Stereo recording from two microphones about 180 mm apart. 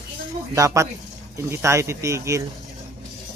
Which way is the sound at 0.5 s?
15° right (ahead or behind).